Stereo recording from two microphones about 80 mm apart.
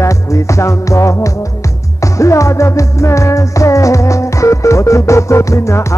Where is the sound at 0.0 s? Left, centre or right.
Left.